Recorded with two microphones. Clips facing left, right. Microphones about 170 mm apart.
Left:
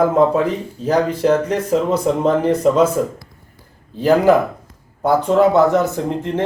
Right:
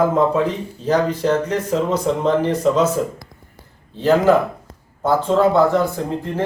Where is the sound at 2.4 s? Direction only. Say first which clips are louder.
Left 3 dB; 30° left (ahead or behind).